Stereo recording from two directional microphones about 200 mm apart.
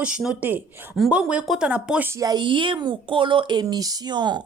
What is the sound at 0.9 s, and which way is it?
Speech, centre (ahead or behind).